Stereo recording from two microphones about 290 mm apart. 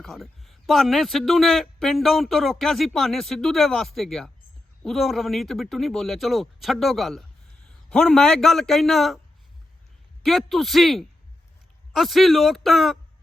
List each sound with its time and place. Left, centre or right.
0.0 s a man's voice: centre
10.2 s a man's voice: centre